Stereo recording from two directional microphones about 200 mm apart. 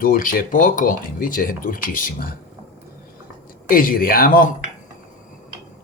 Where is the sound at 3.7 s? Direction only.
45° left (ahead or behind).